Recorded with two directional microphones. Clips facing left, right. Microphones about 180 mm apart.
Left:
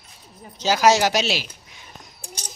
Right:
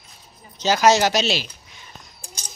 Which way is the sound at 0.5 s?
10° left (ahead or behind).